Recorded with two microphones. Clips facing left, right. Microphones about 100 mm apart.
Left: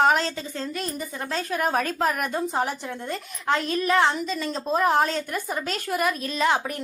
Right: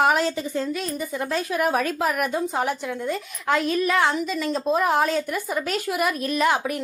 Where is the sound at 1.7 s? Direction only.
10° right (ahead or behind).